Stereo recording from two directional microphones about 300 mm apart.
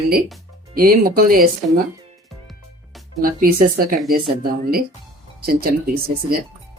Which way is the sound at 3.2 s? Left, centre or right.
Right.